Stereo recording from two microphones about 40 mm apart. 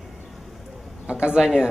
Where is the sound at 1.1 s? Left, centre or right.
Right.